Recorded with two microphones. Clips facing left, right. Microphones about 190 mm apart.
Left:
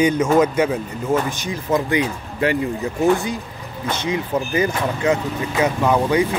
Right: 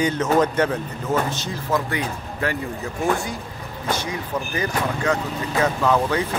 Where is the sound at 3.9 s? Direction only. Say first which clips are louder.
Left 4 dB; 20° left (ahead or behind).